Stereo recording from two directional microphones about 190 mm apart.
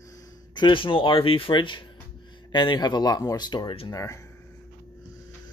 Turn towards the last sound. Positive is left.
turn(degrees=25)  # may be behind; listen again after turning